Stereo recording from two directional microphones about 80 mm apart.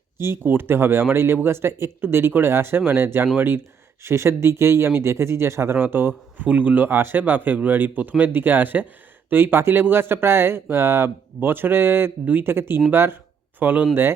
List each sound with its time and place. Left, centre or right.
0.2 s speech: right